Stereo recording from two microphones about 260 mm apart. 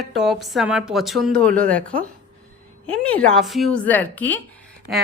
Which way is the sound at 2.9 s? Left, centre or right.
Centre.